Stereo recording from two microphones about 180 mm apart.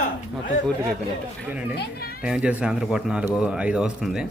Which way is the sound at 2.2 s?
5° right (ahead or behind).